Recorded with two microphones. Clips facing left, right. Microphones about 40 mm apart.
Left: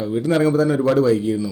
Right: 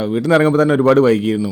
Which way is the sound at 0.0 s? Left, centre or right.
Right.